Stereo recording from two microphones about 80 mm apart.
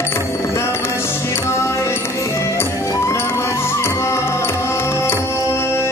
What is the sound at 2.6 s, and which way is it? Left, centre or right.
Music, left.